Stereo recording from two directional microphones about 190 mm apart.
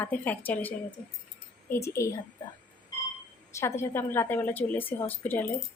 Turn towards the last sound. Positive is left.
turn(degrees=10)  # may be behind; listen again after turning